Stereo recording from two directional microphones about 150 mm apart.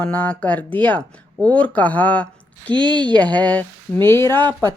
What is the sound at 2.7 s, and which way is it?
Speech, 30° right (ahead or behind).